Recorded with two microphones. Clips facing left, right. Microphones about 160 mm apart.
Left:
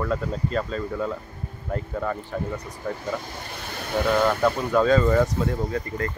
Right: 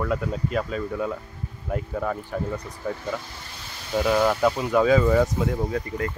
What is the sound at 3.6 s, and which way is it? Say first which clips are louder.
Vehicle: left 8 dB; 60° left (ahead or behind).